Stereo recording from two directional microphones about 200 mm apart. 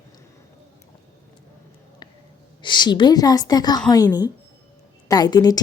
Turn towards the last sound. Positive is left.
turn(degrees=20)  # may be behind; listen again after turning